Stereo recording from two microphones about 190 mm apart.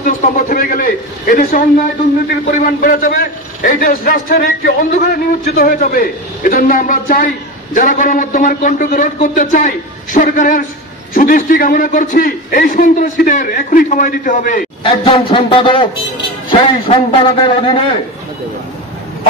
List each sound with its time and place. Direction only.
0.0 s a man's voice: 45° left (ahead or behind)
14.8 s a man's voice: 25° left (ahead or behind)